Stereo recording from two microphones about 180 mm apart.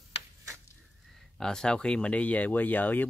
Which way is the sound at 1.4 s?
5° left (ahead or behind).